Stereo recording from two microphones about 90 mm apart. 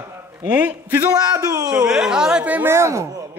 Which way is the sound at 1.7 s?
5° right (ahead or behind).